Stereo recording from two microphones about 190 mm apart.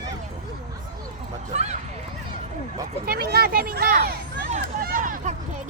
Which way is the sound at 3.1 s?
55° right (ahead or behind).